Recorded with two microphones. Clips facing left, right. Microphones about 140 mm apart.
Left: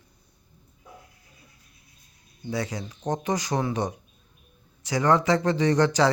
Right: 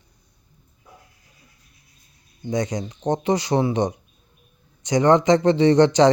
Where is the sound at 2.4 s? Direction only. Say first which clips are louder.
Right 6 dB; 35° right (ahead or behind).